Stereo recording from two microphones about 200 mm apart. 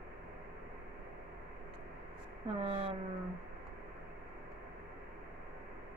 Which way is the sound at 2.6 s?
30° right (ahead or behind).